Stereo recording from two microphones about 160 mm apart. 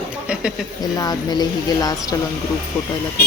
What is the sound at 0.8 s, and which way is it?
Speech, 25° left (ahead or behind).